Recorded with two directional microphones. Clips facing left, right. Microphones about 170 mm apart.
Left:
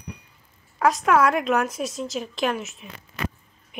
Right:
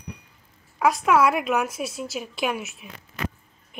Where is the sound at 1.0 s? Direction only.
5° right (ahead or behind).